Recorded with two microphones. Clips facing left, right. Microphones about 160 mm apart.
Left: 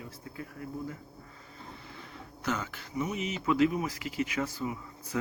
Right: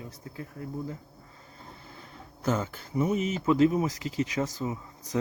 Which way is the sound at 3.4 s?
30° right (ahead or behind).